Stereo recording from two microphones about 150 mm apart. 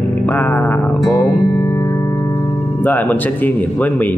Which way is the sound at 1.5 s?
25° left (ahead or behind).